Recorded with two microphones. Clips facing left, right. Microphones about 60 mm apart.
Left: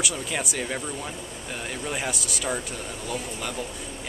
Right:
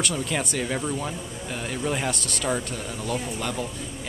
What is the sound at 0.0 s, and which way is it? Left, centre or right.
Speech, centre.